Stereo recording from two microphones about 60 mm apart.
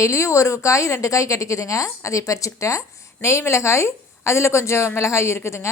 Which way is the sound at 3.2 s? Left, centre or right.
Left.